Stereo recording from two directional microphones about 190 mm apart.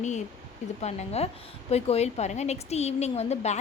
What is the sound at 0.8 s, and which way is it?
Speech, 35° left (ahead or behind).